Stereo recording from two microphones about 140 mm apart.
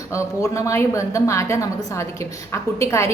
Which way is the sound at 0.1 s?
20° left (ahead or behind).